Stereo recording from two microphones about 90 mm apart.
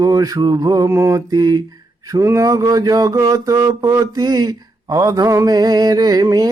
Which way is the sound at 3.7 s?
40° right (ahead or behind).